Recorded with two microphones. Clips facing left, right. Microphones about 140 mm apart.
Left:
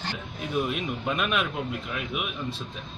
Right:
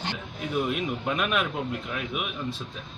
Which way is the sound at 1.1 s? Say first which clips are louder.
Even; centre (ahead or behind).